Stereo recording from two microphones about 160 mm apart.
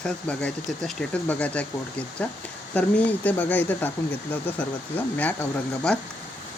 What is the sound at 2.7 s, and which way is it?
Speech, 10° left (ahead or behind).